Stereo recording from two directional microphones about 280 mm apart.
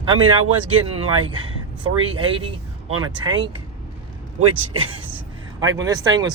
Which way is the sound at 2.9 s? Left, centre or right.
Right.